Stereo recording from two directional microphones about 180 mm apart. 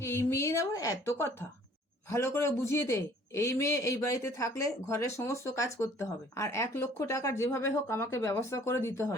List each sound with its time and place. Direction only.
0.0 s a woman's voice: 15° left (ahead or behind)